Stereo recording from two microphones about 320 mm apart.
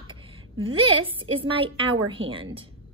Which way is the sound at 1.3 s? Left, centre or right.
Centre.